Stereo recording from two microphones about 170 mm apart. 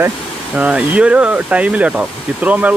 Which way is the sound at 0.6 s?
5° right (ahead or behind).